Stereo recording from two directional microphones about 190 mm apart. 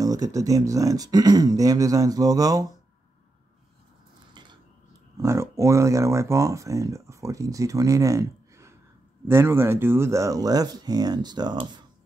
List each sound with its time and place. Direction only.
0.0 s speech: 20° right (ahead or behind)
5.1 s speech: 15° right (ahead or behind)